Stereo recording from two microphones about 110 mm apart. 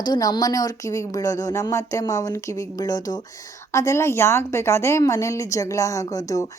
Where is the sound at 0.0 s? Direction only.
35° left (ahead or behind).